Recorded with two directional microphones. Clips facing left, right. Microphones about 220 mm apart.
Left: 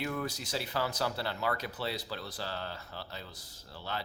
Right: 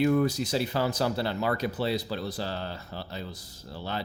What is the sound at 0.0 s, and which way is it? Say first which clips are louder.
A man's voice: right 12 dB; 25° right (ahead or behind).